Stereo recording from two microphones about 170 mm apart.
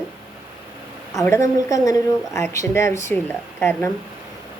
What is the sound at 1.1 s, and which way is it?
A woman's voice, 15° left (ahead or behind).